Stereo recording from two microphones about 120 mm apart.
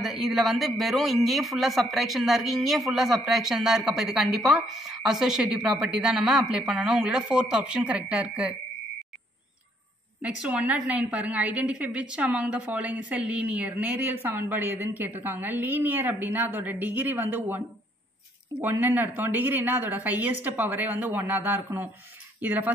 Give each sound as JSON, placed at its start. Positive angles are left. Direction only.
{"t": 0.0, "sound": "a man's voice", "side_deg": 0}
{"t": 10.2, "sound": "a woman's voice", "side_deg": -10}
{"t": 18.6, "sound": "a woman's voice", "side_deg": -15}